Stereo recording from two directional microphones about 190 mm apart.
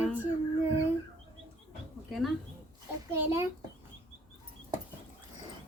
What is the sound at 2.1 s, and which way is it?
Speech, centre (ahead or behind).